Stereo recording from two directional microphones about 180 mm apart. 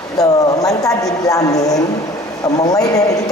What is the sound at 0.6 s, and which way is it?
Speech, 20° left (ahead or behind).